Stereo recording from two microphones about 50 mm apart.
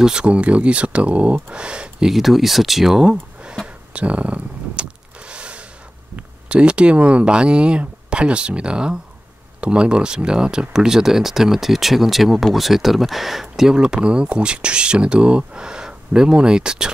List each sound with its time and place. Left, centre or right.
0.0 s speech: centre
2.1 s speech: centre
3.9 s a sound: right
6.1 s speech: right; by 13.7 s centre
13.7 s speech: centre